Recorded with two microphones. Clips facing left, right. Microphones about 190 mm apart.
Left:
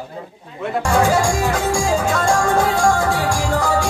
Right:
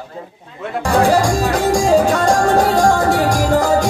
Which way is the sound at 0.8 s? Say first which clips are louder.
Right 3 dB; 35° right (ahead or behind).